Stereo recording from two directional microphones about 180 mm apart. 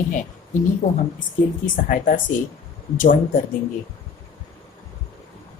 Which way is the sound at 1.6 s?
45° left (ahead or behind).